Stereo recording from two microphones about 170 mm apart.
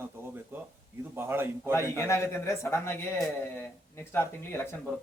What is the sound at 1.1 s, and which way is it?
Speech, 15° right (ahead or behind).